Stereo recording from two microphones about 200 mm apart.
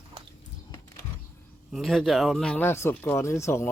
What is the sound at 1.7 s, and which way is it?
Speech, centre (ahead or behind).